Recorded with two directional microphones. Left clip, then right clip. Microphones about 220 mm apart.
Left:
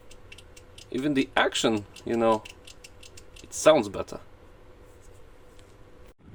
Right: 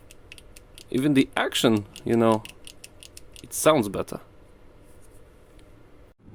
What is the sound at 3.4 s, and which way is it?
Speech, 40° right (ahead or behind).